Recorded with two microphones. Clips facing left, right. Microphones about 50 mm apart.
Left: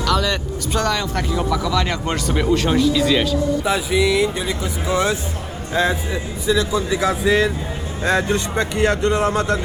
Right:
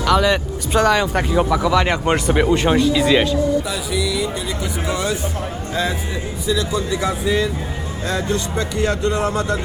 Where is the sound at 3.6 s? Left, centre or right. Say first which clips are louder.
Left 5 dB; left.